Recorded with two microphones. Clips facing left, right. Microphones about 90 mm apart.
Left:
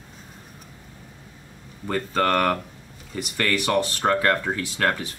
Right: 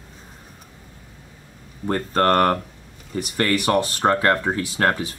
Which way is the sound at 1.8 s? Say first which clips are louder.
Right 4 dB; 40° right (ahead or behind).